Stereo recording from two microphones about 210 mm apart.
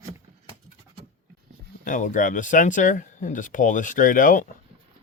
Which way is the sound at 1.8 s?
40° left (ahead or behind).